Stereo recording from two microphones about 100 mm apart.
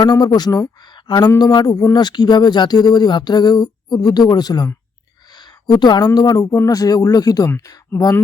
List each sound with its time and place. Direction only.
0.0 s speech: 45° left (ahead or behind)
5.3 s a sound: 45° left (ahead or behind)
6.1 s speech: 40° left (ahead or behind)